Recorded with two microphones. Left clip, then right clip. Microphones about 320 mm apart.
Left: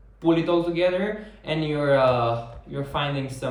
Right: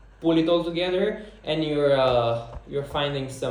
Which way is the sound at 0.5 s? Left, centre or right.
Centre.